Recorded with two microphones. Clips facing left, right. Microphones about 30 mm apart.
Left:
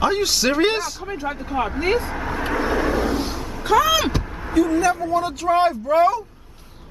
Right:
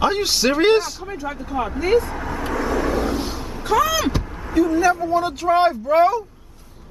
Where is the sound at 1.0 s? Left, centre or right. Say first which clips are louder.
Left 1 dB; centre.